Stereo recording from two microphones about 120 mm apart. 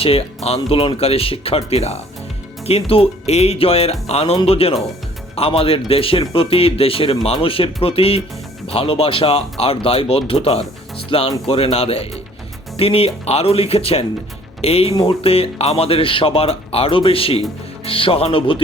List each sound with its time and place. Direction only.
0.0 s speech: 55° left (ahead or behind)